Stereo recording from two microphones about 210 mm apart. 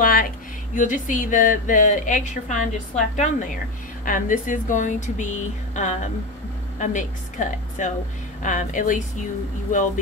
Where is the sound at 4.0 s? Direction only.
40° left (ahead or behind).